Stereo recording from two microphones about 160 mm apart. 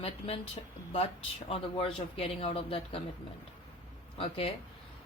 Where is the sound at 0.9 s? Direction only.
35° left (ahead or behind).